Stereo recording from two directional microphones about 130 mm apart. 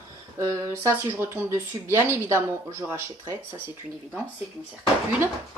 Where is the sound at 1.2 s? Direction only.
20° right (ahead or behind).